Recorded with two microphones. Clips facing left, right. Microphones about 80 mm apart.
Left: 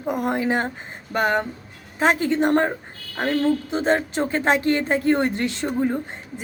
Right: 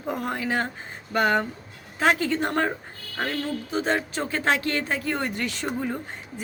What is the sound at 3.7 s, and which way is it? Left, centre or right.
A woman's voice, left.